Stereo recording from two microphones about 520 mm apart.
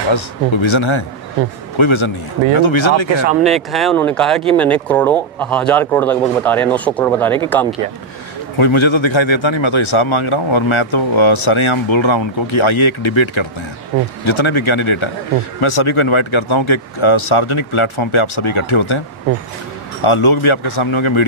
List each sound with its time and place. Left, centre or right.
0.1 s speech: left
3.4 s speech: centre
8.5 s speech: left
20.0 s speech: left